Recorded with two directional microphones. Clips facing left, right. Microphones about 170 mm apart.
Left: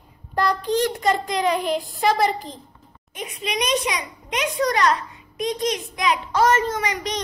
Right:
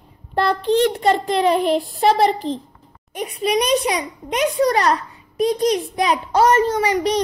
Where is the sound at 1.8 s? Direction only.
40° right (ahead or behind).